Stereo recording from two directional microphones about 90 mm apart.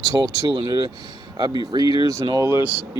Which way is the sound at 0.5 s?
60° right (ahead or behind).